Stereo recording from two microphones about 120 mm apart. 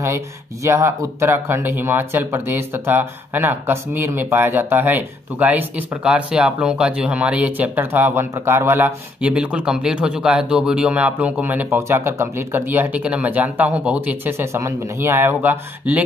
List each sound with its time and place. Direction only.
0.7 s speech: 25° right (ahead or behind)